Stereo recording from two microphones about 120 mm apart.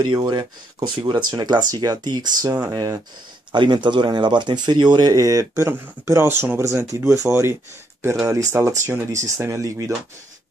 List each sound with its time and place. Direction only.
0.0 s speech: 40° right (ahead or behind)